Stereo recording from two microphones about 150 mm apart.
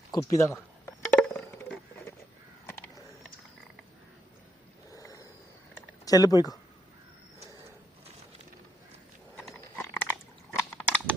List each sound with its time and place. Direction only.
0.1 s speech: 20° left (ahead or behind)
1.1 s a sound: 10° left (ahead or behind)
4.9 s a sound: 20° left (ahead or behind)
6.1 s speech: 25° left (ahead or behind)
9.3 s pig: centre (ahead or behind)
9.7 s biting: 15° left (ahead or behind)